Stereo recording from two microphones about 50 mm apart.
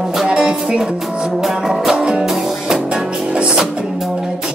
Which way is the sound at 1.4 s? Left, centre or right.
Centre.